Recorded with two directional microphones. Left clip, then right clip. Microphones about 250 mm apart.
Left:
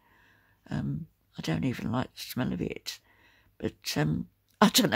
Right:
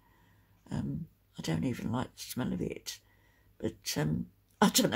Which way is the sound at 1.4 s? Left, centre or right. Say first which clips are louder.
Left 3 dB; left.